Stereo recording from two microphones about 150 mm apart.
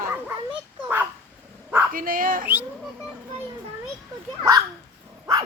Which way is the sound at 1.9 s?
70° right (ahead or behind).